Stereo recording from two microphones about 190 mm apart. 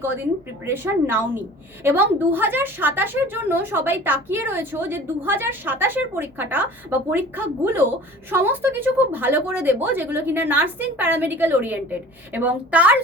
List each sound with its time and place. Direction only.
0.6 s a woman's voice: 10° right (ahead or behind)